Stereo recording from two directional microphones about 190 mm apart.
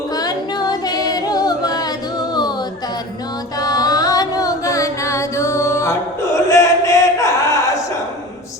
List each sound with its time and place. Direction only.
0.1 s a capella: 20° left (ahead or behind)
3.6 s carnatic music: 20° left (ahead or behind)